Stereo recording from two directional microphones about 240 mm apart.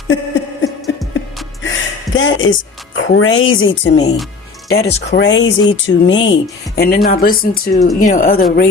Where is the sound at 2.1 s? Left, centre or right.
Left.